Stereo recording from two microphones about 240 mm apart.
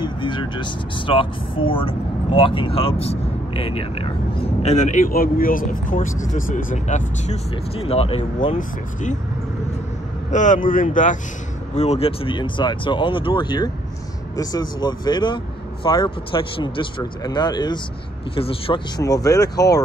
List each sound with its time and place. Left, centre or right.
0.0 s speech: centre
10.3 s speech: left; by 19.6 s centre